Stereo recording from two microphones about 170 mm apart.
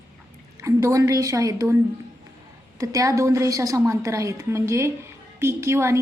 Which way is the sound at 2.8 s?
20° right (ahead or behind).